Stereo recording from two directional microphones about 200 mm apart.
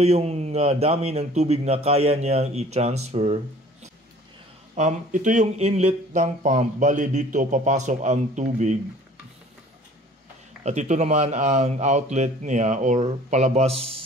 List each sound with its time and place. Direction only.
0.0 s speech: 30° right (ahead or behind)
4.7 s speech: 40° right (ahead or behind)
10.6 s speech: 35° right (ahead or behind)